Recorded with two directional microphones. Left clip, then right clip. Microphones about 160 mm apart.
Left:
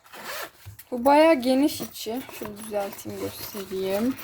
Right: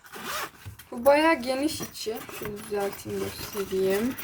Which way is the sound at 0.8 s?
65° left (ahead or behind).